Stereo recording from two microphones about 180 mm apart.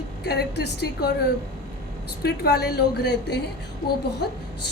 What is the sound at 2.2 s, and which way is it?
A woman's voice, 60° left (ahead or behind).